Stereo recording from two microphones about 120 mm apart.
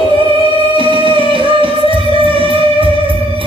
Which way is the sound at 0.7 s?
45° right (ahead or behind).